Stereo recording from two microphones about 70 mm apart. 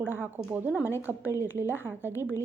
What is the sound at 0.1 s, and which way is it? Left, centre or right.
A woman's voice, right.